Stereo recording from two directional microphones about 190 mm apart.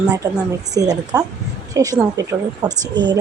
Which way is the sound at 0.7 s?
20° right (ahead or behind).